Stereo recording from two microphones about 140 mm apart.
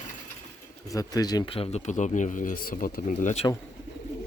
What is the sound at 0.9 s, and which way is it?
Speech, 25° left (ahead or behind).